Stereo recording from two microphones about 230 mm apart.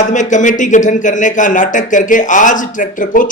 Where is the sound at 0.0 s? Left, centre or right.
Left.